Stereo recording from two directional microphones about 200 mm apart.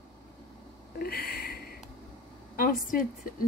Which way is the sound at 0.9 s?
50° left (ahead or behind).